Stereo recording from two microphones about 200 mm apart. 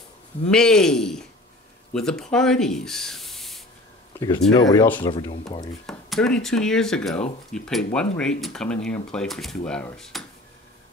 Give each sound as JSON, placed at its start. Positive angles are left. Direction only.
{"t": 0.5, "sound": "speech", "side_deg": 5}
{"t": 5.9, "sound": "speech", "side_deg": 0}